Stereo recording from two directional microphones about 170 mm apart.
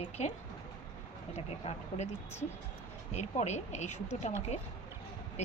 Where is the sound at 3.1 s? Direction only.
40° left (ahead or behind).